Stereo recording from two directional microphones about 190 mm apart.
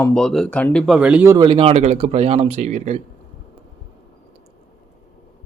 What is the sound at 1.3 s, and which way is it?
Speech, 20° right (ahead or behind).